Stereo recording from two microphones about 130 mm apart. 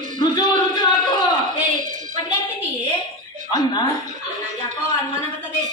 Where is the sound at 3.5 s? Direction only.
35° left (ahead or behind).